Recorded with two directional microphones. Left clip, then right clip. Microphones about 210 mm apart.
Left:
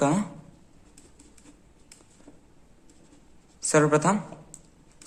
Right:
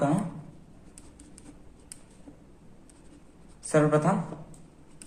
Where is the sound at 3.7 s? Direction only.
45° left (ahead or behind).